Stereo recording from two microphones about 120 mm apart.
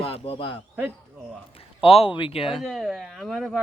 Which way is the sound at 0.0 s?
50° left (ahead or behind).